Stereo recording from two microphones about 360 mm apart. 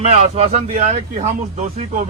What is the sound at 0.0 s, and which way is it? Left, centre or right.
A man's voice, centre.